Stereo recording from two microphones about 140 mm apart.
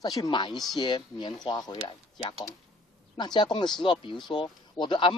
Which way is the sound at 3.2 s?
30° left (ahead or behind).